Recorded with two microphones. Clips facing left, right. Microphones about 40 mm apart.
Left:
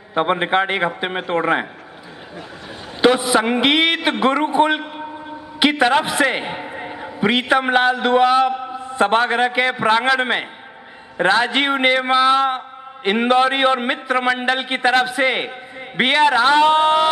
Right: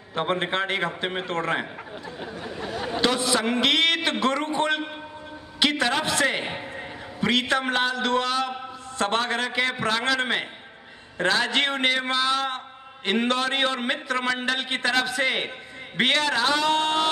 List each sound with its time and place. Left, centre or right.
0.1 s a man's voice: left
3.0 s a man's voice: left